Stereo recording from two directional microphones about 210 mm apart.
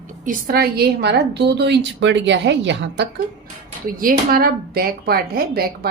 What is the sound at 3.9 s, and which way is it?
A woman's voice, 40° right (ahead or behind).